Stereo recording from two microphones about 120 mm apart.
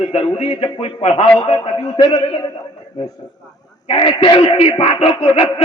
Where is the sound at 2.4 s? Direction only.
30° left (ahead or behind).